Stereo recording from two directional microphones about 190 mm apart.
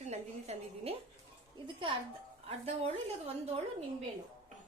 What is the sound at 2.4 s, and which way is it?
A woman's voice, 30° right (ahead or behind).